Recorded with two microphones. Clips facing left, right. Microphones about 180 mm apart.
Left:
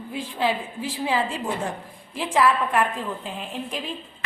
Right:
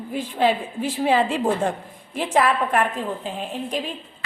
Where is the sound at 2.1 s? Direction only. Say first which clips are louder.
Right 1 dB; 50° right (ahead or behind).